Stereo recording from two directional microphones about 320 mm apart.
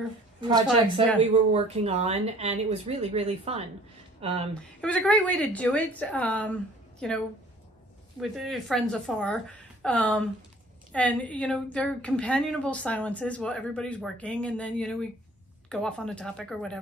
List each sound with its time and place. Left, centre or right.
1.3 s speech: centre
4.8 s a woman's voice: centre